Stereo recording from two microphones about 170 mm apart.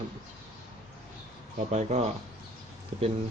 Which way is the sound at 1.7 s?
40° right (ahead or behind).